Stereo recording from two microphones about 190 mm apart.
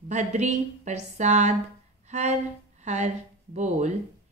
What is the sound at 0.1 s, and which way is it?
Speech, 40° right (ahead or behind).